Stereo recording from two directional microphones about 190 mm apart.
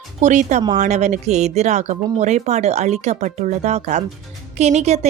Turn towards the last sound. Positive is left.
turn(degrees=-35)  # may be behind; listen again after turning